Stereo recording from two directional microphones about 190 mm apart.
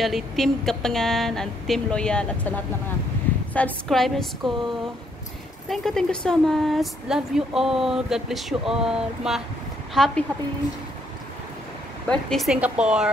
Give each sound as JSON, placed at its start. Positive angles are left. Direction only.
{"t": 0.0, "sound": "speech", "side_deg": 0}
{"t": 5.7, "sound": "speech", "side_deg": 5}
{"t": 12.1, "sound": "speech", "side_deg": 0}